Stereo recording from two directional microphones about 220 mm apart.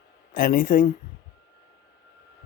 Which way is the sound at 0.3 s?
40° left (ahead or behind).